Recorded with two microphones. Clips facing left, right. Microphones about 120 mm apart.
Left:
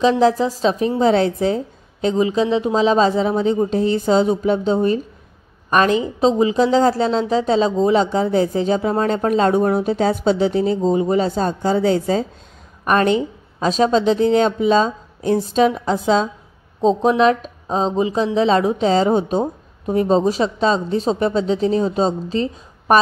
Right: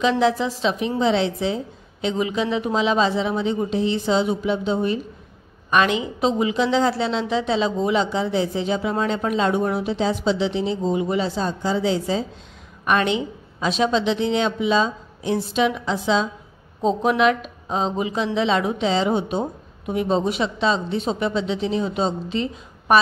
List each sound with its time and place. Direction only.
0.0 s speech: 40° left (ahead or behind)
16.8 s speech: 30° left (ahead or behind)